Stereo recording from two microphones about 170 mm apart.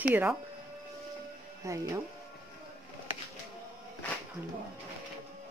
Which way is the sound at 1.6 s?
20° right (ahead or behind).